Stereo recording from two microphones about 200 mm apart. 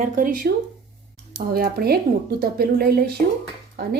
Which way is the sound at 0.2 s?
45° right (ahead or behind).